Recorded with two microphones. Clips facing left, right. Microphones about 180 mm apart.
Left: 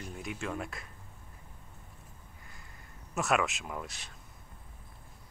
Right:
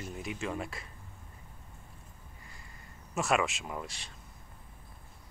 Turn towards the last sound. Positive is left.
turn(degrees=0)  # may be behind; listen again after turning